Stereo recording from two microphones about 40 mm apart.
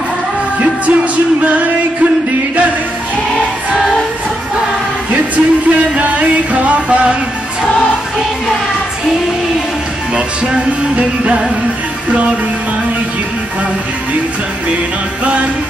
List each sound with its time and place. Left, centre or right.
5.1 s music: right
10.1 s music: right